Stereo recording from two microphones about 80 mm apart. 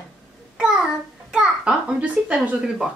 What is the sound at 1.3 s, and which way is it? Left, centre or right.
A child's voice, centre.